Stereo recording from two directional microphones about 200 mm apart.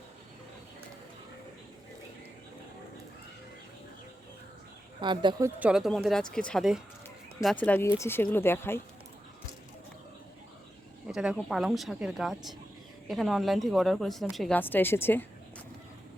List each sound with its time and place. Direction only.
4.9 s speech: 25° right (ahead or behind)
5.5 s speech: 5° right (ahead or behind); by 8.8 s 10° left (ahead or behind)
11.1 s speech: 5° right (ahead or behind)